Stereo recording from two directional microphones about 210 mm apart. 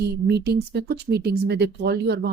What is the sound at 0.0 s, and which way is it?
Speech, 50° right (ahead or behind).